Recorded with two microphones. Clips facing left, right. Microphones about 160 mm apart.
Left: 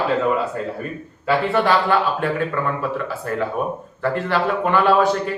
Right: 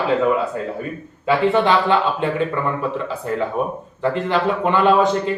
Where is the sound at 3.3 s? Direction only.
20° right (ahead or behind).